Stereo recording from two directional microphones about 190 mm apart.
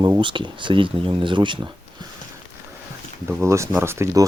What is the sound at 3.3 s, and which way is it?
Speech, 10° right (ahead or behind).